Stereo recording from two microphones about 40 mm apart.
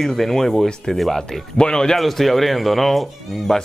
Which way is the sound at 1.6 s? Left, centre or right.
Centre.